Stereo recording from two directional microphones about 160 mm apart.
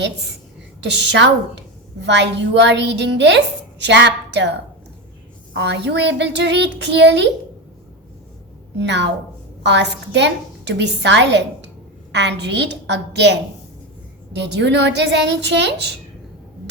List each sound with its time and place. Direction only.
0.8 s a woman's voice: 90° right
5.5 s a woman's voice: 90° right
8.8 s a woman's voice: 90° right